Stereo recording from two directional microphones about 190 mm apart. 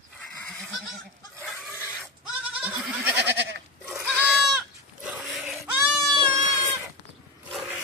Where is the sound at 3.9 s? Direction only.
5° right (ahead or behind).